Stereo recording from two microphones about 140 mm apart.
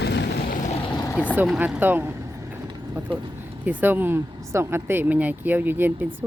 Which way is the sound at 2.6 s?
30° right (ahead or behind).